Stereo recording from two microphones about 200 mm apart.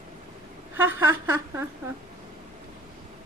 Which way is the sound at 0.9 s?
10° right (ahead or behind).